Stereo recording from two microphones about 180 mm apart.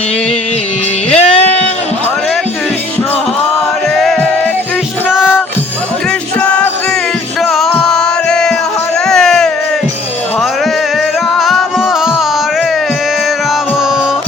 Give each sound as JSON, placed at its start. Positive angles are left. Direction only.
{"t": 1.2, "sound": "bleat", "side_deg": 35}
{"t": 3.9, "sound": "music", "side_deg": 0}
{"t": 6.4, "sound": "music", "side_deg": 5}
{"t": 9.0, "sound": "a sound", "side_deg": 5}
{"t": 11.3, "sound": "music", "side_deg": 0}